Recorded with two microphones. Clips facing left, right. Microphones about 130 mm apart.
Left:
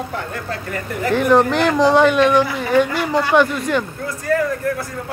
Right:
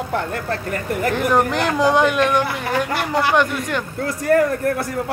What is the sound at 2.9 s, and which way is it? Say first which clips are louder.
Speech: left 1 dB; 70° right (ahead or behind).